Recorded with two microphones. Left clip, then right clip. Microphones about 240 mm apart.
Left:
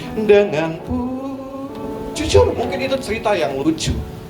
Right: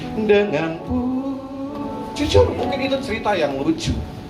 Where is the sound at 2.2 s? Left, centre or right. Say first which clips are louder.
Left 2 dB; left.